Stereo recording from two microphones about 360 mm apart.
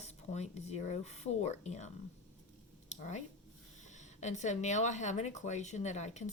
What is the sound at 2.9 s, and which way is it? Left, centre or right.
Speech, centre.